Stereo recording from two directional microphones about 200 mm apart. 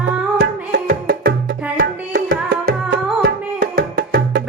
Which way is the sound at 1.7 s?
45° right (ahead or behind).